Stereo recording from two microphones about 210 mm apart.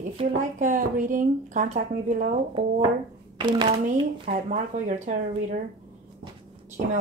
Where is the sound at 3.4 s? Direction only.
20° right (ahead or behind).